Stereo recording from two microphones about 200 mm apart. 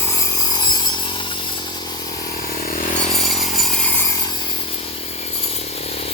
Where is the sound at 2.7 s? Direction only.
35° left (ahead or behind).